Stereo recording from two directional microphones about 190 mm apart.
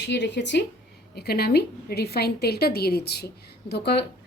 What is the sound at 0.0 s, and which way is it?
A woman's voice, 65° left (ahead or behind).